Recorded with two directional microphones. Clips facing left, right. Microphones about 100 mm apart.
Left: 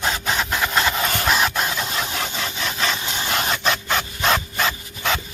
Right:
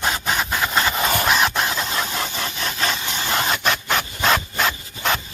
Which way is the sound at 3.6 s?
Centre (ahead or behind).